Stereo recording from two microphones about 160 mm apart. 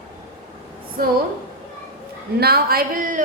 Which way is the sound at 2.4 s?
75° right (ahead or behind).